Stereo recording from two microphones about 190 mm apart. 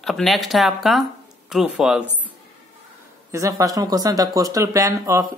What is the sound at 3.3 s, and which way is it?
A man's voice, 15° right (ahead or behind).